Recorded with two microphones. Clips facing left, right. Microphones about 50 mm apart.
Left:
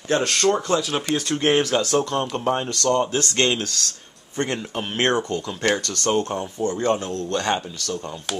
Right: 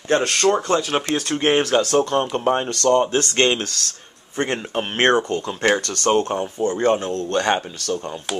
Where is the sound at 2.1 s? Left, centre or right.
Centre.